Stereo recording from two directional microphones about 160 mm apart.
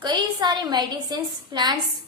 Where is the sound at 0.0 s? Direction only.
25° right (ahead or behind).